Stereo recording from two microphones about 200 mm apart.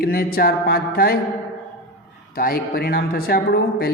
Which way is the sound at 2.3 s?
45° left (ahead or behind).